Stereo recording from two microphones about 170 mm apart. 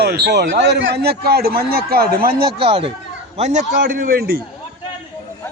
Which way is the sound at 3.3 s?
45° right (ahead or behind).